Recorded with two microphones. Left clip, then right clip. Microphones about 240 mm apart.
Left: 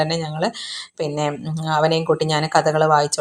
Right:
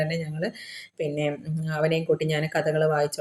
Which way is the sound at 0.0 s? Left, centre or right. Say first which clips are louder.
Left 7 dB; left.